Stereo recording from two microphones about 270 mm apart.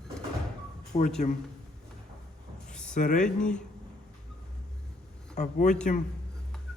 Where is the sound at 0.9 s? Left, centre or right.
Left.